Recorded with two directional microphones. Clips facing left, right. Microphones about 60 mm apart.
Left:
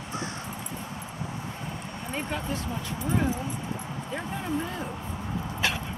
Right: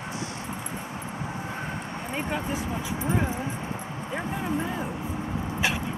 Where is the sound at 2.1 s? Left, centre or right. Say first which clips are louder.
Right 2 dB; centre.